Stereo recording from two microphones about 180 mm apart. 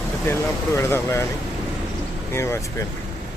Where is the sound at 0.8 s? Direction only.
15° left (ahead or behind).